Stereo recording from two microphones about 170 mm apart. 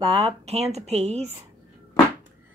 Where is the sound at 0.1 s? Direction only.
35° right (ahead or behind).